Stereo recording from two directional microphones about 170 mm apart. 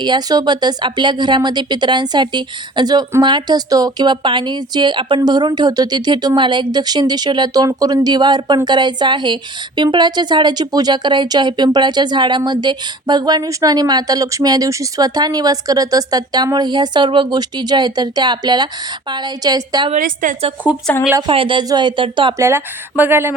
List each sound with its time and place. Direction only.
0.0 s speech: 25° right (ahead or behind)
19.9 s a woman's voice: 50° right (ahead or behind)
20.9 s speech: 5° left (ahead or behind)
21.2 s speech: 30° right (ahead or behind)
22.4 s speech: 15° right (ahead or behind)